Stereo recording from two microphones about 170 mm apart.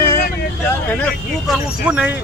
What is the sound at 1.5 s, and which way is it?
Speech, 5° right (ahead or behind).